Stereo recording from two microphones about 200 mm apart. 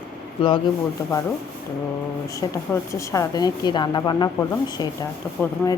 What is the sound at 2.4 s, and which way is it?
A woman's voice, 20° left (ahead or behind).